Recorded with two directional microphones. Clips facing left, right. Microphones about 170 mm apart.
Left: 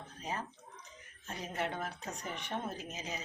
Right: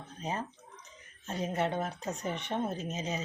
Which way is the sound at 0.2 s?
25° right (ahead or behind).